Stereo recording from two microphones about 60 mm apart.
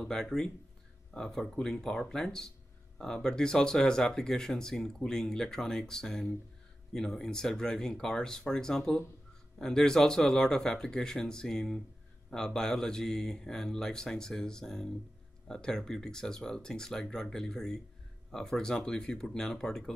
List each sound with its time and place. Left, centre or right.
0.0 s speech: centre